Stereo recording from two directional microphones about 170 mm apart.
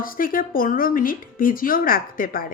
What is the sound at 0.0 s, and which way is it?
A woman's voice, 55° left (ahead or behind).